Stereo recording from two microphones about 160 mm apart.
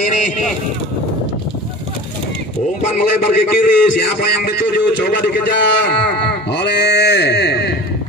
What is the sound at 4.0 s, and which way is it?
A man's voice, 90° left.